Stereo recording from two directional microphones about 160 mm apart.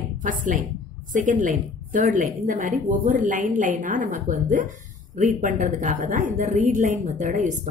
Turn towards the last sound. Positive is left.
turn(degrees=-50)  # may be behind; listen again after turning